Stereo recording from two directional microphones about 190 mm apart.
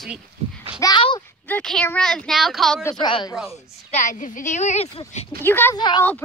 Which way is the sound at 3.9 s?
40° left (ahead or behind).